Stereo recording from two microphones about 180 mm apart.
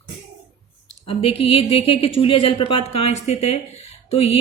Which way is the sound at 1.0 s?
30° left (ahead or behind).